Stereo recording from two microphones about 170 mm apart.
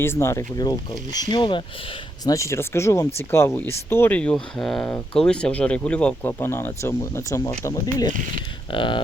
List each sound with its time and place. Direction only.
0.0 s speech: 15° left (ahead or behind)
2.2 s speech: 20° left (ahead or behind)